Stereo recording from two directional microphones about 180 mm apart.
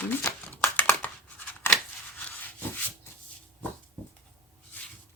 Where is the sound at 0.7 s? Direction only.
10° left (ahead or behind).